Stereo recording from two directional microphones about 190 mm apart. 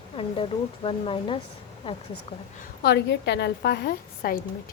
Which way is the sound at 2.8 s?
65° left (ahead or behind).